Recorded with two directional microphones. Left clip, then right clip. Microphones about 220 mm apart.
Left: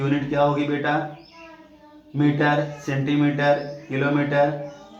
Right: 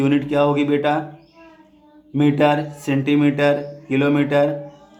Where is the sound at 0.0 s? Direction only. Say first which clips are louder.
Right 3 dB; 55° right (ahead or behind).